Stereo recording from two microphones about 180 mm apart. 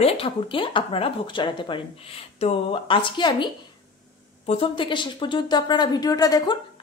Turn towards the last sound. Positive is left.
turn(degrees=20)  # may be behind; listen again after turning